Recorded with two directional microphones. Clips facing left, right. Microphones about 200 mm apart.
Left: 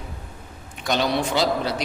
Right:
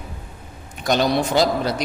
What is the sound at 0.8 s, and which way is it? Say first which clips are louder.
Speech: right 4 dB; 45° right (ahead or behind).